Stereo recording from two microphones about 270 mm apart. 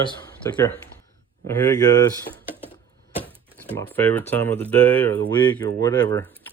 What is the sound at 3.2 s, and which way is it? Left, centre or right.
Speech, centre.